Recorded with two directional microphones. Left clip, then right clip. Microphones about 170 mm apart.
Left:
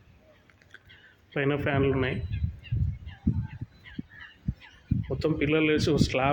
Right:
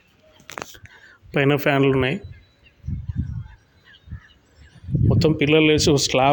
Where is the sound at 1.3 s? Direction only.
70° right (ahead or behind).